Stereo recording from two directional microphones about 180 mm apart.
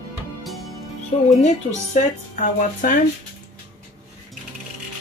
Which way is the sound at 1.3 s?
40° left (ahead or behind).